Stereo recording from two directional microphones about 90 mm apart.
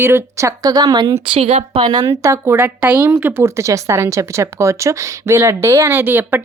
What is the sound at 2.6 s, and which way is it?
Speech, 20° right (ahead or behind).